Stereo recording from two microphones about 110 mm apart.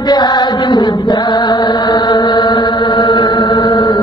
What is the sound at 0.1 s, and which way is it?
Chant, 40° left (ahead or behind).